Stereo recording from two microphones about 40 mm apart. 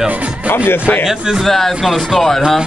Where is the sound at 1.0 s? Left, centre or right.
Centre.